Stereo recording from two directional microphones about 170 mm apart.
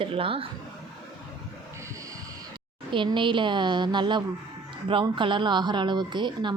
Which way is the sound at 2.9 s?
30° right (ahead or behind).